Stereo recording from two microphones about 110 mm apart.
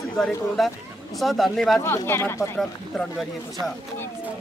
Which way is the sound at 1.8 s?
25° left (ahead or behind).